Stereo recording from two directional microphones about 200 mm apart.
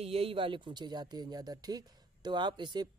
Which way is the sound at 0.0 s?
30° right (ahead or behind).